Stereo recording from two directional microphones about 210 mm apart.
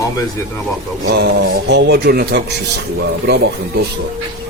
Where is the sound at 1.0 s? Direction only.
55° right (ahead or behind).